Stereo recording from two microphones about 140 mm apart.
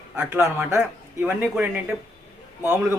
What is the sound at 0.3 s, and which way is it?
A man's voice, 20° right (ahead or behind).